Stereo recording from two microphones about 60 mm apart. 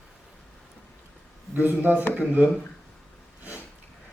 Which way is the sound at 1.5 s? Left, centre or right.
Right.